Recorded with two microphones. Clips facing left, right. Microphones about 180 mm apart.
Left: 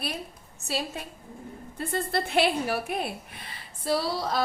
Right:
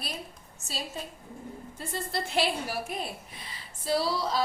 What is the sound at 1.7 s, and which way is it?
A woman's voice, 60° left (ahead or behind).